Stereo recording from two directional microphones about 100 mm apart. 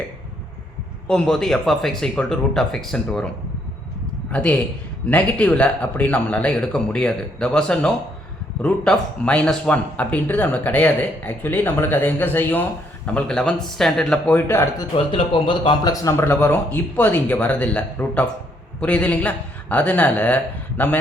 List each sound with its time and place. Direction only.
1.0 s speech: 10° left (ahead or behind)
4.3 s speech: 10° left (ahead or behind)
13.1 s speech: 10° left (ahead or behind)
14.3 s a man's voice: 20° left (ahead or behind)
14.9 s a man's voice: 60° left (ahead or behind)
15.8 s speech: 35° left (ahead or behind); by 21.0 s 20° left (ahead or behind)